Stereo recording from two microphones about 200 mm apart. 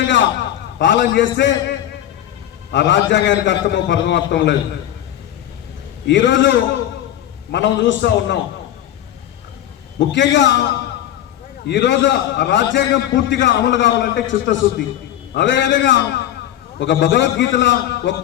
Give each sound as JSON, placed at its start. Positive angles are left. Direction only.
{"t": 0.8, "sound": "a man's voice", "side_deg": 65}
{"t": 2.7, "sound": "a man's voice", "side_deg": 65}
{"t": 6.1, "sound": "a man's voice", "side_deg": 65}
{"t": 10.1, "sound": "a man's voice", "side_deg": 65}